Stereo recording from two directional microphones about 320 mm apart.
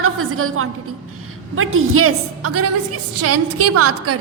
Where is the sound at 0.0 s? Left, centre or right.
Right.